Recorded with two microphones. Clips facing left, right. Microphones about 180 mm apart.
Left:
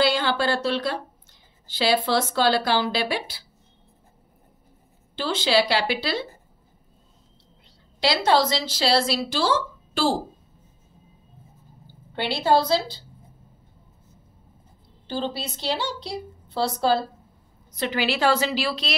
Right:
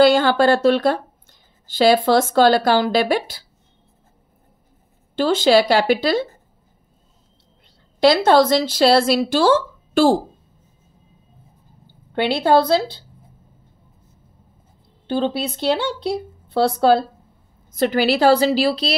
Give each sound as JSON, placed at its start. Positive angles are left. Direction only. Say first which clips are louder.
{"t": 0.0, "sound": "speech", "louder": "right 9 dB", "side_deg": -50}
{"t": 5.1, "sound": "speech", "louder": "right 7 dB", "side_deg": -50}
{"t": 8.0, "sound": "speech", "louder": "right 7 dB", "side_deg": -50}
{"t": 12.1, "sound": "speech", "louder": "right 5 dB", "side_deg": -55}
{"t": 15.0, "sound": "speech", "louder": "right 8 dB", "side_deg": -60}
{"t": 17.7, "sound": "a woman's voice", "louder": "right 8 dB", "side_deg": -45}